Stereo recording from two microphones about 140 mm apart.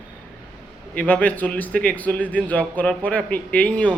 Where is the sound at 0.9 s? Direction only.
10° left (ahead or behind).